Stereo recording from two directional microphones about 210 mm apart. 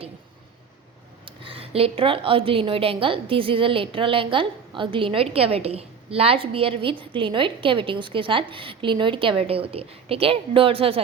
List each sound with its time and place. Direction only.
1.2 s speech: 25° right (ahead or behind)